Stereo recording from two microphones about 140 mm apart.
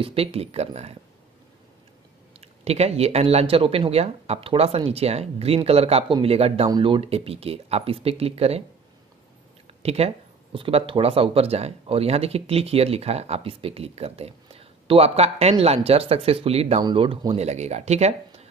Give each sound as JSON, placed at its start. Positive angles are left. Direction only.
{"t": 0.0, "sound": "speech", "side_deg": -45}
{"t": 2.4, "sound": "speech", "side_deg": -50}
{"t": 9.8, "sound": "speech", "side_deg": -45}
{"t": 17.4, "sound": "speech", "side_deg": -50}